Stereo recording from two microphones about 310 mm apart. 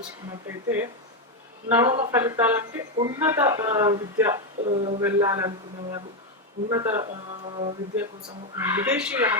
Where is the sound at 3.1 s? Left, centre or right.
Centre.